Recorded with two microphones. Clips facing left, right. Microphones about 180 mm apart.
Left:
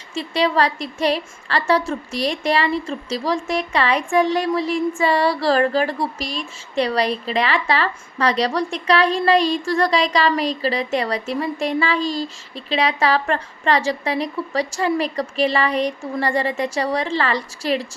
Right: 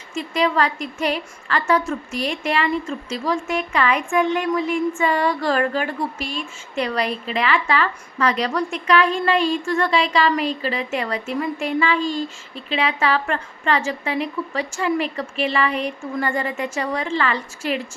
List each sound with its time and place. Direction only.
0.1 s a woman's voice: 35° left (ahead or behind)